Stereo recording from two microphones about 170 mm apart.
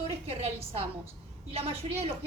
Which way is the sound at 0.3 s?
35° right (ahead or behind).